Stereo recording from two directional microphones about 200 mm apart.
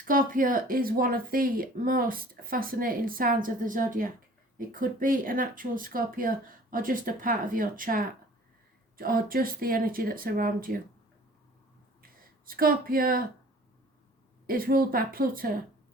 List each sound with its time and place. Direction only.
0.0 s speech: 45° right (ahead or behind)
12.2 s a woman's voice: 45° right (ahead or behind)
14.4 s speech: 45° right (ahead or behind)